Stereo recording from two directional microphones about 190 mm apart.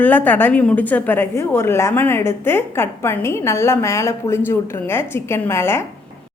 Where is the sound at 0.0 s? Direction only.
10° left (ahead or behind).